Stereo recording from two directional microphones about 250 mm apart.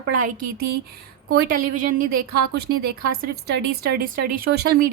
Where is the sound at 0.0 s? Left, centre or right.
Right.